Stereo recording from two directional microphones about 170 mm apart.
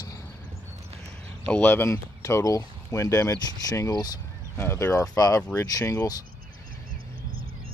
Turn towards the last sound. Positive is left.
turn(degrees=-60)  # may be behind; listen again after turning